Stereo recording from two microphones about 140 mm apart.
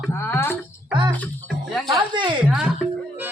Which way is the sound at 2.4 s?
5° right (ahead or behind).